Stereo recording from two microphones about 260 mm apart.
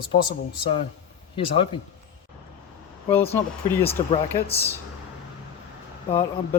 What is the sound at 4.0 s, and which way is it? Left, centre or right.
Speech, centre.